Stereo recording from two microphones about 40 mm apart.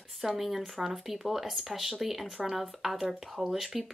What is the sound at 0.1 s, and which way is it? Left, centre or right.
Speech, centre.